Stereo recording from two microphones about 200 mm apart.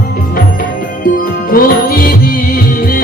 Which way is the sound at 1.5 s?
45° left (ahead or behind).